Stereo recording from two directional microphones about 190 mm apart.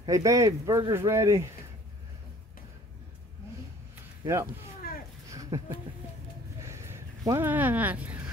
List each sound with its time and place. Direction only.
0.0 s speech: 15° right (ahead or behind)
4.2 s speech: 15° right (ahead or behind)
5.3 s a sound: 20° right (ahead or behind)